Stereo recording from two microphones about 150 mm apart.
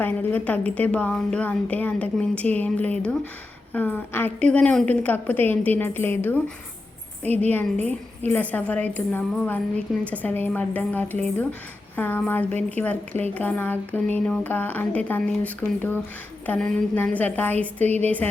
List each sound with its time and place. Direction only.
0.0 s a woman's voice: 10° left (ahead or behind)
17.8 s a woman's voice: 45° right (ahead or behind)